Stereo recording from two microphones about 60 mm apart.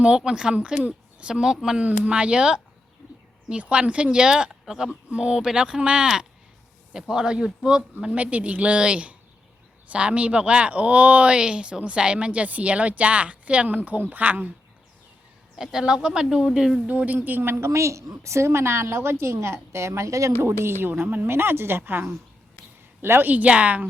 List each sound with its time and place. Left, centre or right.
0.2 s speech: centre
7.9 s speech: right
15.5 s speech: centre
16.8 s a woman's voice: right
17.5 s a woman's voice: right
20.4 s a woman's voice: right
20.9 s a woman's voice: right
23.3 s speech: right